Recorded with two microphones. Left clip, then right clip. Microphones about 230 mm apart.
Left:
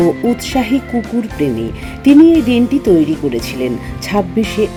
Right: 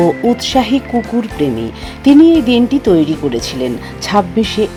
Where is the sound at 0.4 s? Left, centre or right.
Centre.